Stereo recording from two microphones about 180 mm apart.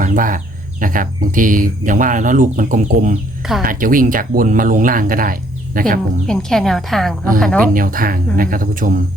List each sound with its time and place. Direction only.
0.0 s speech: 50° right (ahead or behind)
6.2 s a woman's voice: 5° left (ahead or behind)
7.7 s speech: 50° right (ahead or behind)